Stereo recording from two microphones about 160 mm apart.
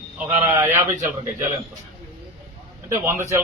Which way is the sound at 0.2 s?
15° right (ahead or behind).